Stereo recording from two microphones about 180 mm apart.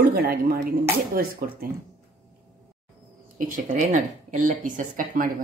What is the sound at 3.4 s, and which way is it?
A woman's voice, 50° right (ahead or behind).